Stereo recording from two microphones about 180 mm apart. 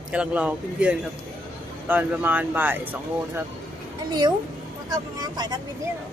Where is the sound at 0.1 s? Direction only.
5° right (ahead or behind).